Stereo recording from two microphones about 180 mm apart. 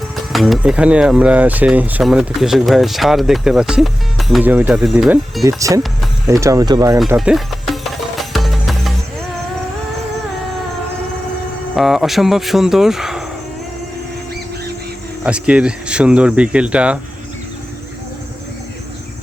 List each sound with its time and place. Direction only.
0.3 s speech: centre (ahead or behind)
5.4 s speech: 20° right (ahead or behind)
7.2 s music: centre (ahead or behind)
11.8 s speech: centre (ahead or behind)
15.2 s speech: 5° right (ahead or behind)